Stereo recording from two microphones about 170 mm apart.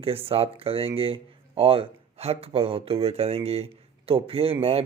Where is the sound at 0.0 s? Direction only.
35° right (ahead or behind).